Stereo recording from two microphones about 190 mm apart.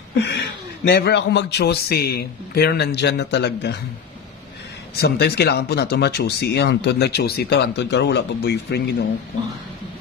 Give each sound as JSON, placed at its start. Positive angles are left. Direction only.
{"t": 0.1, "sound": "speech", "side_deg": 60}
{"t": 5.0, "sound": "speech", "side_deg": 60}